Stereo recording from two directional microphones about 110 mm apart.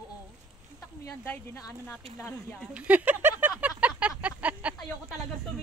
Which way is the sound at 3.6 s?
10° right (ahead or behind).